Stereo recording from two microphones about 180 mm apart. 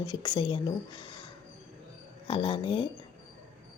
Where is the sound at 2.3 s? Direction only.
30° left (ahead or behind).